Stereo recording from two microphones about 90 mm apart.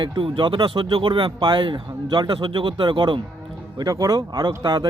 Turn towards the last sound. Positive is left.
turn(degrees=-55)  # may be behind; listen again after turning